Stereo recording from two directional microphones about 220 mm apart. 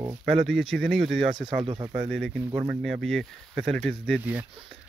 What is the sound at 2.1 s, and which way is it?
Speech, centre (ahead or behind).